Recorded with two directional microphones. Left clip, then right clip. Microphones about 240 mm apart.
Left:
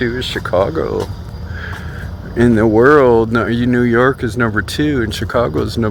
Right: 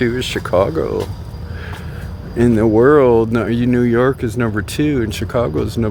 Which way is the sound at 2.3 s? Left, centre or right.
Centre.